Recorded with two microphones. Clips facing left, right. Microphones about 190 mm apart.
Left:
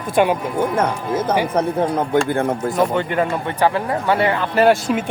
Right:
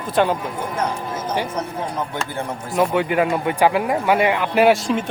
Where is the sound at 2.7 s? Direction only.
5° right (ahead or behind).